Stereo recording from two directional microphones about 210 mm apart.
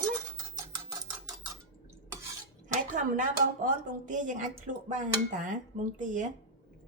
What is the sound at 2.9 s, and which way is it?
Speech, 35° right (ahead or behind).